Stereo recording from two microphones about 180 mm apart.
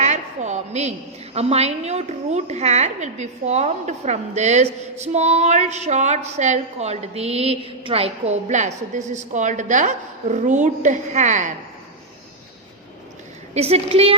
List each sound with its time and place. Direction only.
0.0 s a woman's voice: 40° right (ahead or behind)
13.5 s a woman's voice: 35° right (ahead or behind)